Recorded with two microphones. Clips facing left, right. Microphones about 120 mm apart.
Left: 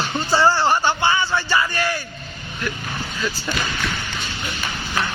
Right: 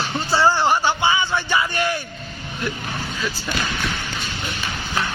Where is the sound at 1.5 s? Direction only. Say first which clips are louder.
Even; 20° right (ahead or behind).